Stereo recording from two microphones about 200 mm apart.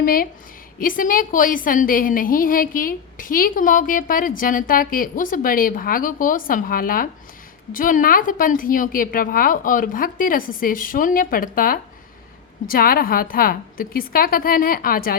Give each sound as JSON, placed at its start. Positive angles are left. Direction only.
{"t": 0.0, "sound": "a woman's voice", "side_deg": 45}